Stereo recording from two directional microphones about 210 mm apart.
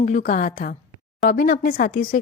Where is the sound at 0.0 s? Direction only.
40° left (ahead or behind).